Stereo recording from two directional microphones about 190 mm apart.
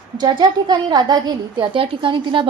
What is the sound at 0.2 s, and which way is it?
A woman's voice, 25° right (ahead or behind).